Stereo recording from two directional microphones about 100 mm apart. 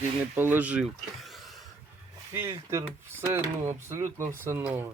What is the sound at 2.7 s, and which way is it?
Speech, 25° right (ahead or behind).